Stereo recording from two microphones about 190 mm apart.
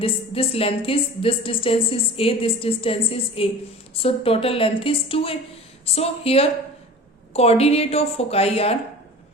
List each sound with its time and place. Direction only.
0.0 s a woman's voice: 30° left (ahead or behind)